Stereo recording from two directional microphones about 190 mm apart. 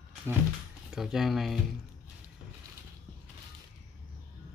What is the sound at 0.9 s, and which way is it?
Speech, centre (ahead or behind).